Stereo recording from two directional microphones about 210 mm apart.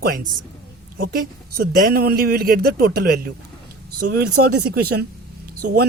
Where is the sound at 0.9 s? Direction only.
45° right (ahead or behind).